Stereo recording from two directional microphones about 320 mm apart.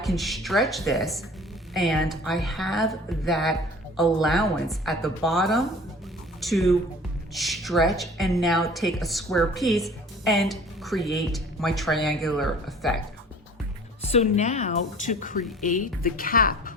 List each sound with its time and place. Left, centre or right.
0.0 s a woman's voice: centre
14.1 s a woman's voice: left